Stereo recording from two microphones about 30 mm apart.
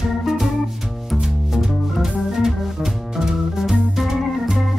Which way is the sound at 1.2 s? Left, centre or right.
Centre.